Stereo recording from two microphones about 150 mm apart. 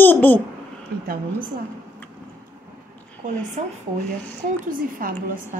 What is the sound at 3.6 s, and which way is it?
Speech, 55° right (ahead or behind).